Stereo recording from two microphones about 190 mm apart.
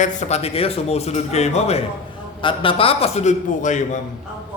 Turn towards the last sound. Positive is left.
turn(degrees=40)  # may be behind; listen again after turning